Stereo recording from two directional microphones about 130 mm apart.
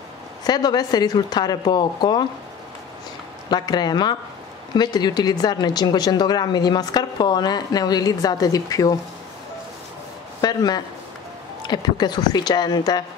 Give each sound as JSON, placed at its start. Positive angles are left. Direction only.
{"t": 0.4, "sound": "a woman's voice", "side_deg": 30}
{"t": 3.4, "sound": "a woman's voice", "side_deg": 30}
{"t": 10.4, "sound": "a woman's voice", "side_deg": 30}